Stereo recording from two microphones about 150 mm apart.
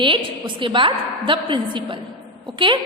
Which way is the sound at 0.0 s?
35° right (ahead or behind).